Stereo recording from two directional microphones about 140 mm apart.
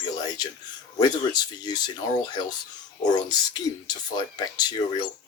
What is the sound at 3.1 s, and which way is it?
Speech, 30° left (ahead or behind).